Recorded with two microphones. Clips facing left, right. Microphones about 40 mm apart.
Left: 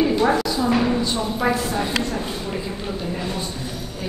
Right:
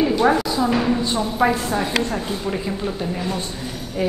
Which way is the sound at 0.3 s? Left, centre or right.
Centre.